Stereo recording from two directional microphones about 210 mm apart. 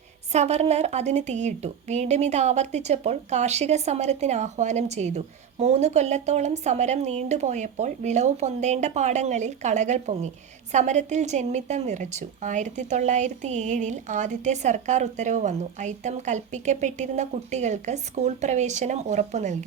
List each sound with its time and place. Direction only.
0.3 s a woman's voice: 30° right (ahead or behind)